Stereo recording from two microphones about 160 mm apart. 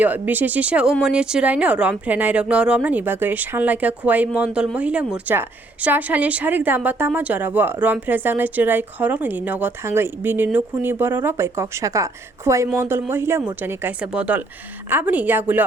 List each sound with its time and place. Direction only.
0.0 s a woman's voice: 10° right (ahead or behind)